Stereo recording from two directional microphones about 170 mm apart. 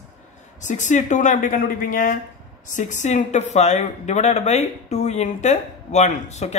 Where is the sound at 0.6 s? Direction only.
45° left (ahead or behind).